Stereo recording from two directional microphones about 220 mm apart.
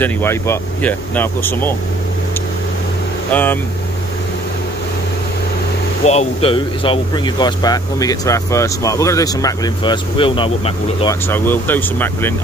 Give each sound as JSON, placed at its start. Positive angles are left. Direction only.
{"t": 0.0, "sound": "speech", "side_deg": 10}
{"t": 3.3, "sound": "speech", "side_deg": 10}
{"t": 6.0, "sound": "speech", "side_deg": 25}
{"t": 11.2, "sound": "speech", "side_deg": 10}